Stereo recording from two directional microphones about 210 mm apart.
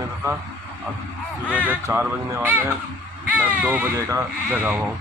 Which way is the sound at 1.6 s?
10° right (ahead or behind).